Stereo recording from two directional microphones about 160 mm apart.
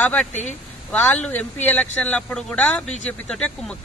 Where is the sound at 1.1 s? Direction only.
10° left (ahead or behind).